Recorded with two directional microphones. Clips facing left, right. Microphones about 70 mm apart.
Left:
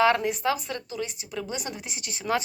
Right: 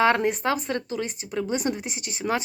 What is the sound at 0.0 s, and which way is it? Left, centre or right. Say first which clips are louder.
Speech: right 1 dB; right.